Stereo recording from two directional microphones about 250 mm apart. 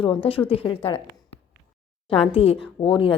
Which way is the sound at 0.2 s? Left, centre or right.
Left.